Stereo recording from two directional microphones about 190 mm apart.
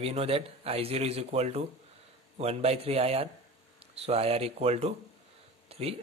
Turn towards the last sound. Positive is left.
turn(degrees=-30)  # may be behind; listen again after turning